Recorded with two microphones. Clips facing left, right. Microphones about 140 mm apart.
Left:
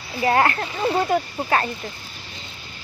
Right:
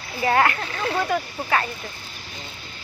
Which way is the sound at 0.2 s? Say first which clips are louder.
Left 1 dB; 30° left (ahead or behind).